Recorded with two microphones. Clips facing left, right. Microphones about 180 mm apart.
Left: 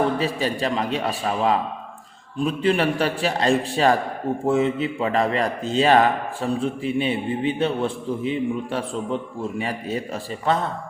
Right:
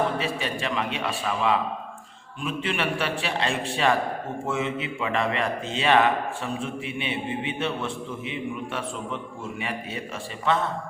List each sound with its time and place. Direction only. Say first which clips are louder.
0.2 s a man's voice: left 5 dB; 35° left (ahead or behind)